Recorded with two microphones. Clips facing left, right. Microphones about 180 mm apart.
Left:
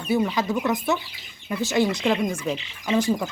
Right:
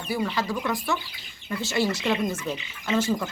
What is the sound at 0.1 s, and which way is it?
Speech, 20° left (ahead or behind).